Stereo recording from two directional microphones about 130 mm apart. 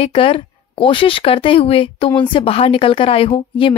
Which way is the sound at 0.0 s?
45° left (ahead or behind).